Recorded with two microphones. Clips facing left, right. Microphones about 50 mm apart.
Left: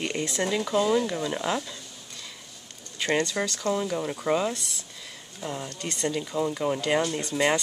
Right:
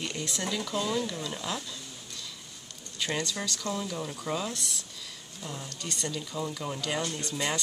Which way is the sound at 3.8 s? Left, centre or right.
Left.